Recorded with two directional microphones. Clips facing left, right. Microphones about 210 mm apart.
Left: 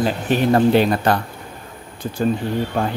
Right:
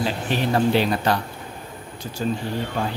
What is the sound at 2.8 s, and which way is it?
Speech, 55° left (ahead or behind).